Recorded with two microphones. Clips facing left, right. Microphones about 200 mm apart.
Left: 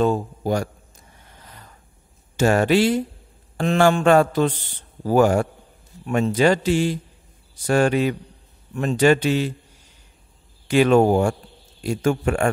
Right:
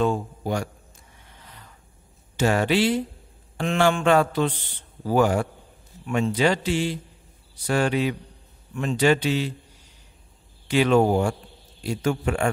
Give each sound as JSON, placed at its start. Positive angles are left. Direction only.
{"t": 0.0, "sound": "a man's voice", "side_deg": 40}
{"t": 1.2, "sound": "a sound", "side_deg": 45}
{"t": 2.3, "sound": "a man's voice", "side_deg": 45}
{"t": 10.7, "sound": "a man's voice", "side_deg": 50}